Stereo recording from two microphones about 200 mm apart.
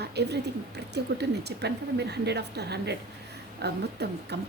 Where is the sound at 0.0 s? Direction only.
55° right (ahead or behind).